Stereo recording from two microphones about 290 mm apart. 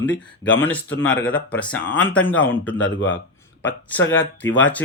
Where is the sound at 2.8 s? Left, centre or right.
Left.